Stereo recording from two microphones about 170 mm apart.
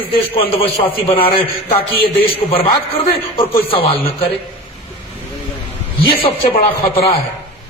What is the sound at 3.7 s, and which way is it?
Speech, 30° left (ahead or behind).